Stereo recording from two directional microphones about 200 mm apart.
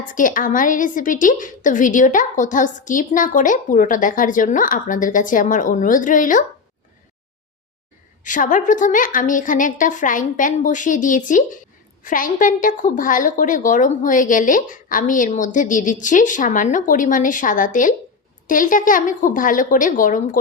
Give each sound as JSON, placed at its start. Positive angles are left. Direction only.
{"t": 0.1, "sound": "a woman's voice", "side_deg": 40}
{"t": 8.2, "sound": "a woman's voice", "side_deg": 40}